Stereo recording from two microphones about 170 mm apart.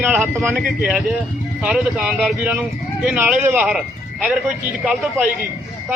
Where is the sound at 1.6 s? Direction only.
5° right (ahead or behind).